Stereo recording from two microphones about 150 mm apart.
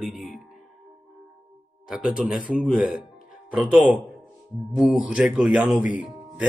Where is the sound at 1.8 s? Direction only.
5° right (ahead or behind).